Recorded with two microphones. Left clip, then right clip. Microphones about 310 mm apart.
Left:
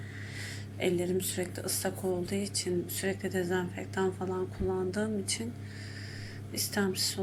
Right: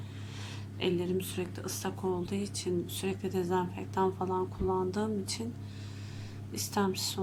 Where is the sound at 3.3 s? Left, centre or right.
Right.